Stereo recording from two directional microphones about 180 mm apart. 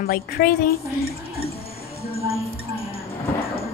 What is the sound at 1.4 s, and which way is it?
Music, 35° left (ahead or behind).